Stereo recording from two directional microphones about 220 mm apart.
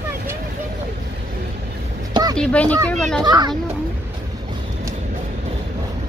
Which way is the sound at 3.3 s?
20° right (ahead or behind).